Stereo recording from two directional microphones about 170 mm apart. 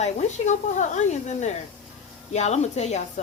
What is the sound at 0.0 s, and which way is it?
A woman's voice, 45° left (ahead or behind).